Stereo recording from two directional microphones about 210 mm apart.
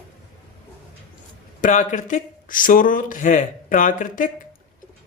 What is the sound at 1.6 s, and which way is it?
Speech, 35° left (ahead or behind).